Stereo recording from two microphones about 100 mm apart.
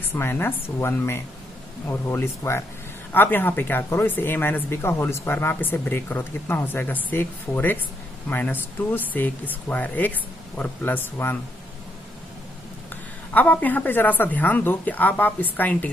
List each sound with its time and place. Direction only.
0.1 s a woman's voice: 25° left (ahead or behind)
12.9 s a woman's voice: 15° left (ahead or behind)